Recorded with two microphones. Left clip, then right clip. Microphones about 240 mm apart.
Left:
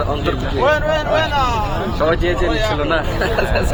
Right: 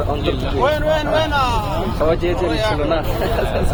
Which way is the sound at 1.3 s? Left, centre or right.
Right.